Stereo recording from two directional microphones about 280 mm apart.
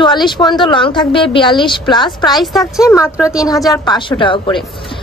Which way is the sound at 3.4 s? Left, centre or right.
Centre.